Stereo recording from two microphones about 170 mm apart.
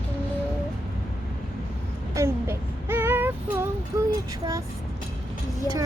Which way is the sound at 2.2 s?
15° right (ahead or behind).